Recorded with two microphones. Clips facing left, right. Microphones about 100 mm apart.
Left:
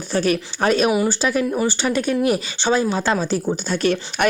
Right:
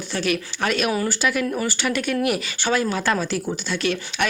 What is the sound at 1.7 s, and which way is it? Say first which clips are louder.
Speech: left 3 dB; 30° left (ahead or behind).